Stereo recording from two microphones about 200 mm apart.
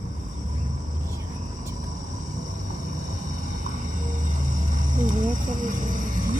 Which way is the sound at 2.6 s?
40° right (ahead or behind).